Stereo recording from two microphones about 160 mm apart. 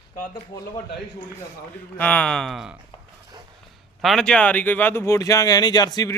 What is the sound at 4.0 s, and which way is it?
Speech, centre (ahead or behind).